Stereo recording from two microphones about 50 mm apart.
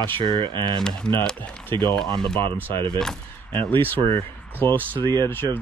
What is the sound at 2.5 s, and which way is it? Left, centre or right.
Speech, left.